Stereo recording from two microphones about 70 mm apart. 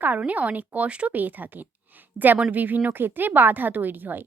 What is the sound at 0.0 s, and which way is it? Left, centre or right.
Speech, right.